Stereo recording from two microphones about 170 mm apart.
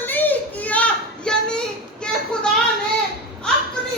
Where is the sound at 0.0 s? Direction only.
10° left (ahead or behind).